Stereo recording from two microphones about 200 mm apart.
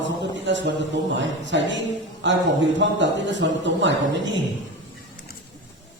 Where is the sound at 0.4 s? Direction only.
65° right (ahead or behind).